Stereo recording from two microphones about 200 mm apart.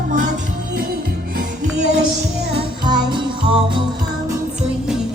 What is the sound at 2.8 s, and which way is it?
Music, 20° right (ahead or behind).